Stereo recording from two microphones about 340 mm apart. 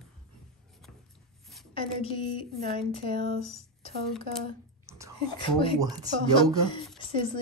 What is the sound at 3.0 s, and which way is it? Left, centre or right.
Speech, right.